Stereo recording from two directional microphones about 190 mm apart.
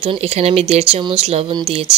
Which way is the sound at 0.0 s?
30° right (ahead or behind).